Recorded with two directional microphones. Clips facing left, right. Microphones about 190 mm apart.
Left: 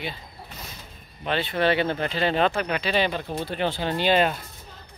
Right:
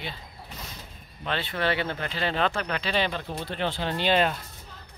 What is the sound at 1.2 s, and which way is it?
Speech, 15° left (ahead or behind).